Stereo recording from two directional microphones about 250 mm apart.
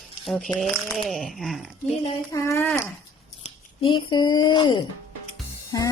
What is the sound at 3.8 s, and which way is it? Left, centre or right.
Speech, centre.